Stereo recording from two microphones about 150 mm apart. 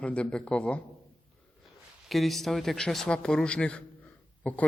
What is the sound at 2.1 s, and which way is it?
A man's voice, centre (ahead or behind).